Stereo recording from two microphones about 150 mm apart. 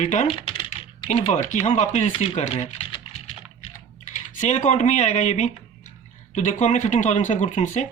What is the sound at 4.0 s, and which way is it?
Speech, 55° left (ahead or behind).